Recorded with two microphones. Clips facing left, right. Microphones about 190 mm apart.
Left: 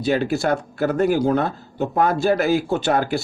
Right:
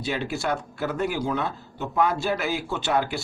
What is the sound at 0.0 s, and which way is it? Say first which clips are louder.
Speech: left 8 dB; 40° left (ahead or behind).